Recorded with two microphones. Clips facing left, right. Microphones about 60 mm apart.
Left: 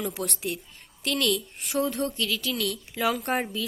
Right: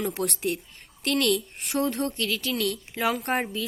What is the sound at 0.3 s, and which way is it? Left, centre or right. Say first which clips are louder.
Speech: right 4 dB; right.